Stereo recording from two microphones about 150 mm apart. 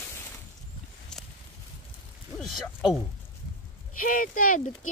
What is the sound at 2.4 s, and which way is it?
Speech, centre (ahead or behind).